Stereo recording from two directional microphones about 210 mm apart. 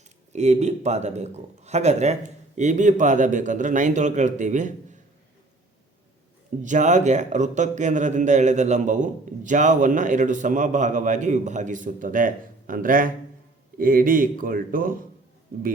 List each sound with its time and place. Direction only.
0.3 s a man's voice: 35° right (ahead or behind)
6.6 s a man's voice: 35° right (ahead or behind)